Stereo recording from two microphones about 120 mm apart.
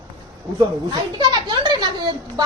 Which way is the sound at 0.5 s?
35° right (ahead or behind).